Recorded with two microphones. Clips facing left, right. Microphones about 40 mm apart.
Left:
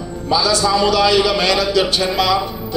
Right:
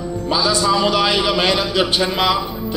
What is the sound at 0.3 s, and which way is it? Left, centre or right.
A man's voice, right.